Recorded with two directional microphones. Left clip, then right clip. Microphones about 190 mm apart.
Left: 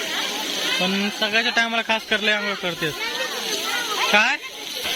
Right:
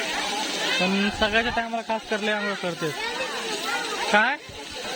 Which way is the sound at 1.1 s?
20° right (ahead or behind).